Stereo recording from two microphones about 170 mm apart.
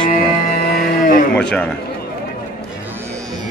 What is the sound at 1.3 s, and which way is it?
Speech, 5° left (ahead or behind).